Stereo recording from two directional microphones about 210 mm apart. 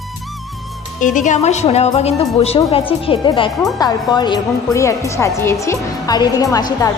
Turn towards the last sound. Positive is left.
turn(degrees=15)  # may be behind; listen again after turning